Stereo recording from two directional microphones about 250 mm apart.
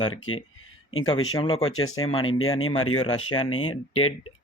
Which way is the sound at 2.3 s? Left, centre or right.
Left.